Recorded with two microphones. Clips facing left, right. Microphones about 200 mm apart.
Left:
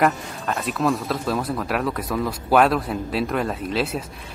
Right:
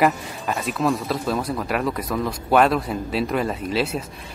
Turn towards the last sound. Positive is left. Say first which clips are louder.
# right 1 dB
turn(degrees=0)  # may be behind; listen again after turning